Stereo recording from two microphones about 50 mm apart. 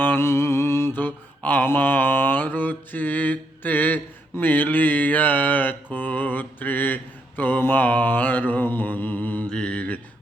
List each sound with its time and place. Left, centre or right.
0.2 s mantra: left
1.4 s mantra: left
9.5 s mantra: centre